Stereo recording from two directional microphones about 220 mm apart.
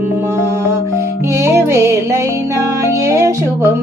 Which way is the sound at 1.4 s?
10° right (ahead or behind).